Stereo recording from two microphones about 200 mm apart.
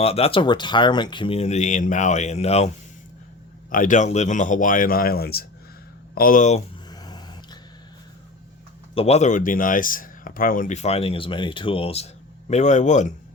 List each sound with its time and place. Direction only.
0.0 s speech: 30° left (ahead or behind)
3.7 s speech: 40° left (ahead or behind)
6.9 s a sound: 20° left (ahead or behind)
9.0 s speech: 30° left (ahead or behind)